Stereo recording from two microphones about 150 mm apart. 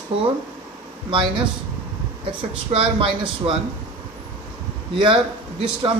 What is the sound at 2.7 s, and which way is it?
Speech, 40° right (ahead or behind).